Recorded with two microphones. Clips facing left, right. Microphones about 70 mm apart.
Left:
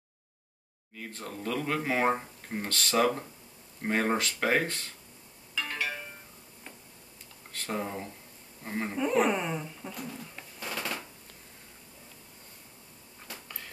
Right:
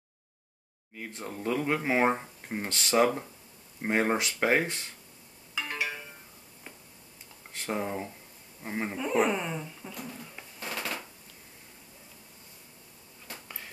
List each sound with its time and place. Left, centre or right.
0.9 s speech: centre
5.5 s music: centre
7.5 s speech: centre
8.9 s speech: centre